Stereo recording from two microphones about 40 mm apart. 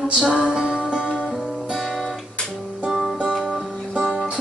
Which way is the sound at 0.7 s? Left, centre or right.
Right.